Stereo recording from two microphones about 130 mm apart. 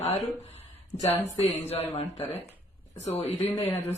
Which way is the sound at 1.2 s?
60° left (ahead or behind).